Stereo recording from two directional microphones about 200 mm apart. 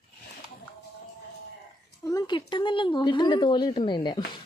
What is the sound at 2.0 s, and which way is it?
Speech, 15° left (ahead or behind).